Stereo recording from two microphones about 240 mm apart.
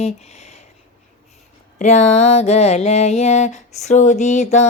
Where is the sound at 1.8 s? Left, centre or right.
Left.